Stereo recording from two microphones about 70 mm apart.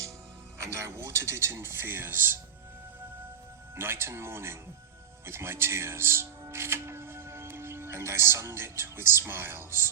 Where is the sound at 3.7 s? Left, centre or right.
Right.